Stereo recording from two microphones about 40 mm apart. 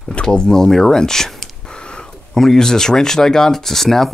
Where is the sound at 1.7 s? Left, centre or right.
Left.